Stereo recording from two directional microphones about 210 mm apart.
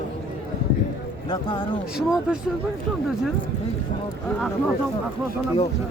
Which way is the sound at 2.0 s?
5° right (ahead or behind).